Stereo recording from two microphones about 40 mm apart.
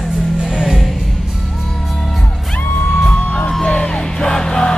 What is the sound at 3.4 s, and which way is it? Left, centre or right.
Music, centre.